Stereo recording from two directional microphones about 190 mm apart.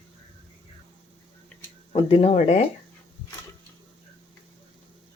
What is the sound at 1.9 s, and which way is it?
Speech, 30° left (ahead or behind).